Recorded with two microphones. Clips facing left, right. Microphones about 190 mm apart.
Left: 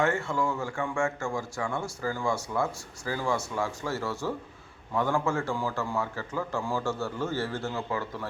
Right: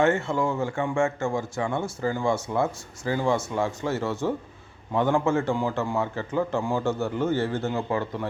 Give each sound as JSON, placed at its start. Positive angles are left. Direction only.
{"t": 0.0, "sound": "speech", "side_deg": -25}